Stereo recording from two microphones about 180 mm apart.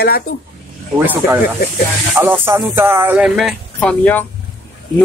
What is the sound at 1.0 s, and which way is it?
Speech, 10° right (ahead or behind).